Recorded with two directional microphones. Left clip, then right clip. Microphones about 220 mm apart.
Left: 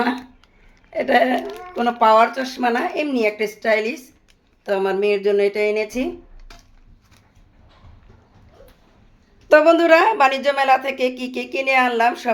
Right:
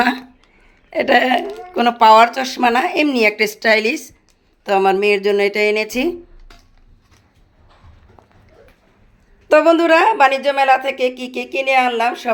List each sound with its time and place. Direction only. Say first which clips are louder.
0.0 s speech: right 5 dB; 40° right (ahead or behind)
9.5 s speech: right 1 dB; 15° right (ahead or behind)